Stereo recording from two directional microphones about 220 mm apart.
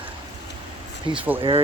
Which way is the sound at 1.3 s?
25° right (ahead or behind).